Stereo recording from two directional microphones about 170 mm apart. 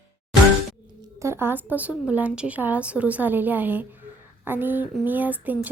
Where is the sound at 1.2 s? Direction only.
15° right (ahead or behind).